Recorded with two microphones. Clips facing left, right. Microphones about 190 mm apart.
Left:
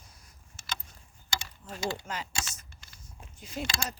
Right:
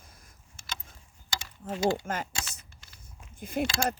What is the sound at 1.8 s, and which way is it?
Speech, 50° right (ahead or behind).